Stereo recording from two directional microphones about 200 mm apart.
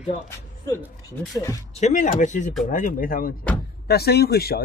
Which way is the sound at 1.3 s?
15° left (ahead or behind).